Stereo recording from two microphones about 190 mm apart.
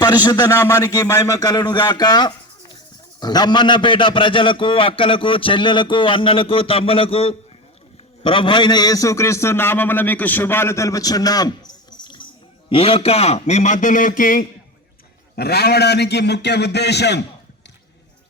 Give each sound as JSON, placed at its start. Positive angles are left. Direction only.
{"t": 0.0, "sound": "a man's voice", "side_deg": 20}
{"t": 15.4, "sound": "a man's voice", "side_deg": 55}